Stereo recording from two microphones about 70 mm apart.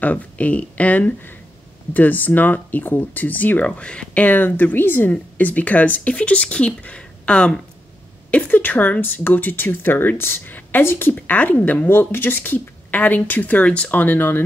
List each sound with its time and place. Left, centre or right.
0.0 s speech: left
8.5 s speech: left